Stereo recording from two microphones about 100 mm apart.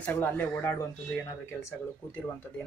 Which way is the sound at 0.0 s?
20° left (ahead or behind).